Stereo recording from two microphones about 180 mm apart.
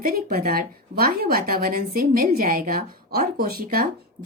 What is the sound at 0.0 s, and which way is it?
A woman's voice, 55° right (ahead or behind).